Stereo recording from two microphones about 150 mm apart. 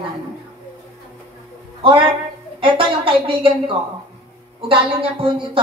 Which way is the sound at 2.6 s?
35° right (ahead or behind).